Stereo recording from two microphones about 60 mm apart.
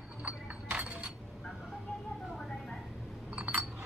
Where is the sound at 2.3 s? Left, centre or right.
Centre.